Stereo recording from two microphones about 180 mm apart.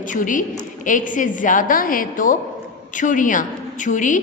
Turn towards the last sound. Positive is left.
turn(degrees=45)  # may be behind; listen again after turning